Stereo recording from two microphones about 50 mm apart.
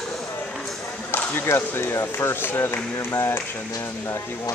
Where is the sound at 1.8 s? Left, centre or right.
Left.